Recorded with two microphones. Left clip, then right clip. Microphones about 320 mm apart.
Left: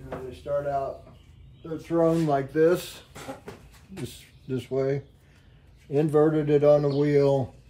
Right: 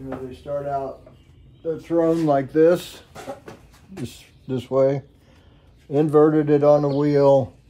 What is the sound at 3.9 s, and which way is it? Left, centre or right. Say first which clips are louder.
Speech: right 4 dB; centre.